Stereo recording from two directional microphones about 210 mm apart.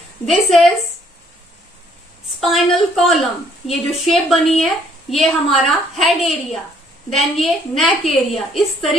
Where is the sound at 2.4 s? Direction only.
Centre (ahead or behind).